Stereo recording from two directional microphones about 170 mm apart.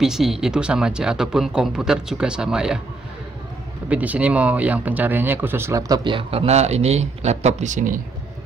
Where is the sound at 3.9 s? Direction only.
10° right (ahead or behind).